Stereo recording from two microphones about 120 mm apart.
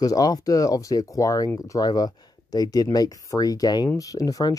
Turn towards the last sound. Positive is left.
turn(degrees=30)  # may be behind; listen again after turning